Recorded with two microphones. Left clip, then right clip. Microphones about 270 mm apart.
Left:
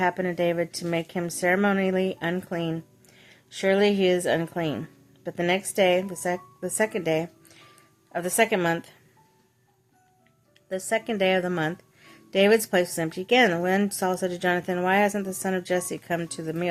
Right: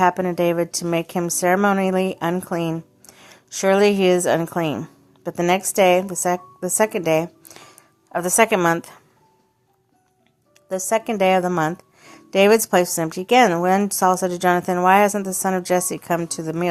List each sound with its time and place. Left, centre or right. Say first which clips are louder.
0.0 s a woman's voice: right 6 dB; centre
10.7 s a woman's voice: right 6 dB; centre